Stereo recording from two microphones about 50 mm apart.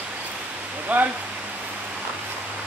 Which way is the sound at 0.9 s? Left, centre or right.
Right.